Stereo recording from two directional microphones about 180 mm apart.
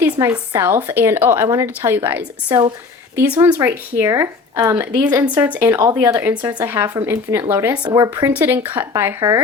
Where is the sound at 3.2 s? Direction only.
10° right (ahead or behind).